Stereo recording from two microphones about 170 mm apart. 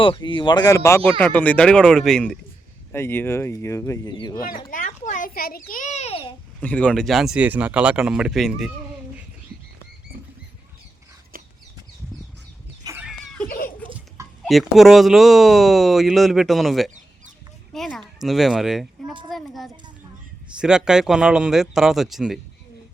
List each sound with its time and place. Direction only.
0.0 s speech: 30° left (ahead or behind); by 2.4 s 5° left (ahead or behind)
2.9 s speech: 15° left (ahead or behind)
4.7 s a child's voice: 45° left (ahead or behind)
6.6 s speech: 10° left (ahead or behind)
12.9 s a sound: 20° right (ahead or behind)
14.4 s speech: centre (ahead or behind)
17.7 s a sound: 5° left (ahead or behind)
18.2 s speech: centre (ahead or behind)